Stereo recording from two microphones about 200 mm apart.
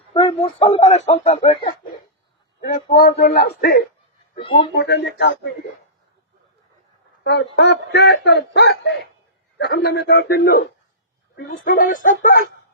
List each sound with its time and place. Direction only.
0.1 s a man's voice: 25° left (ahead or behind)
2.6 s a man's voice: 45° left (ahead or behind)
4.4 s speech: 25° left (ahead or behind)
4.7 s speech: 55° left (ahead or behind)
7.3 s speech: 60° left (ahead or behind)
9.6 s a man's voice: 50° left (ahead or behind)
11.6 s a man's voice: 45° left (ahead or behind)